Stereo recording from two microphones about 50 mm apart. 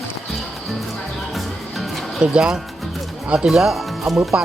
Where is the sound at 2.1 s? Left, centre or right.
Centre.